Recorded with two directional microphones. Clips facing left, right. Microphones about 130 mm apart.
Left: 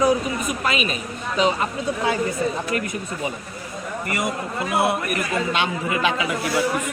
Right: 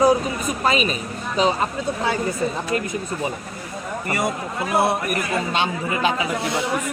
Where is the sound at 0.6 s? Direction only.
35° right (ahead or behind).